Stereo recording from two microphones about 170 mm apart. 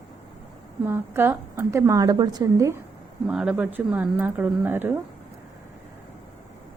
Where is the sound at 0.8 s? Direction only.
15° right (ahead or behind).